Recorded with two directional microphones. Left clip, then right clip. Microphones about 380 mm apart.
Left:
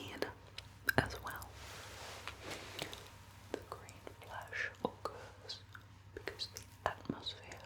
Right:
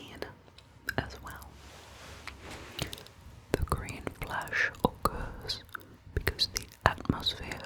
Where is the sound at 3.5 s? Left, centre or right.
Right.